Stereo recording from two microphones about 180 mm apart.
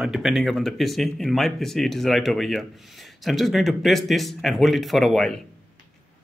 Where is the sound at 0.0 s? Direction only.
Centre (ahead or behind).